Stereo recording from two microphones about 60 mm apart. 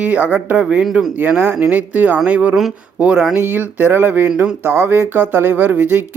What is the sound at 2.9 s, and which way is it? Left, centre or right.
Speech, centre.